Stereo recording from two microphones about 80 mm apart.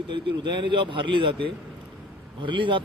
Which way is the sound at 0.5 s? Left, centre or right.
Right.